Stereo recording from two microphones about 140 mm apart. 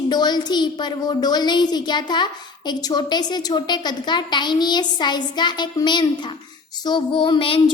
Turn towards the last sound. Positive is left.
turn(degrees=35)  # may be behind; listen again after turning